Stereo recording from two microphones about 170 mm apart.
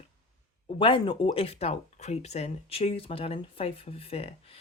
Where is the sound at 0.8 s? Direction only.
30° left (ahead or behind).